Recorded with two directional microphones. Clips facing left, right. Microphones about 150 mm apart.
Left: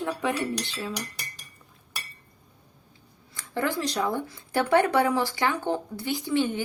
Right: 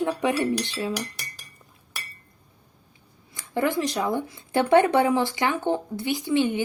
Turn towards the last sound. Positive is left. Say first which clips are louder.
# right 3 dB
turn(degrees=-15)  # may be behind; listen again after turning